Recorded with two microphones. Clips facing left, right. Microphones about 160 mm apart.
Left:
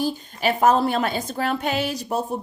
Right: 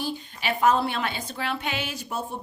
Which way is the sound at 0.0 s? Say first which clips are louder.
Left 7 dB; 40° left (ahead or behind).